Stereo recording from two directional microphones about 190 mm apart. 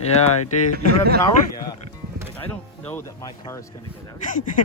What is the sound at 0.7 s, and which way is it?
Speech, 55° right (ahead or behind).